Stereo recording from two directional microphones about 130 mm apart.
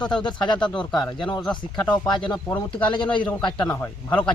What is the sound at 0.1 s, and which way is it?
Speech, 35° left (ahead or behind).